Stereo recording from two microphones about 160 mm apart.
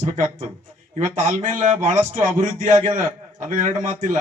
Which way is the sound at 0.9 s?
50° right (ahead or behind).